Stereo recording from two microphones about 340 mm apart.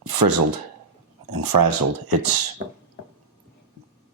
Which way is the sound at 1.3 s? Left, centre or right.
Right.